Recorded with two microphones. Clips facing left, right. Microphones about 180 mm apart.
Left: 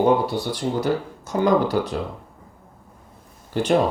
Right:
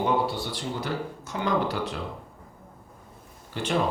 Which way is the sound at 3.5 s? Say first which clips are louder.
Left 9 dB; 40° left (ahead or behind).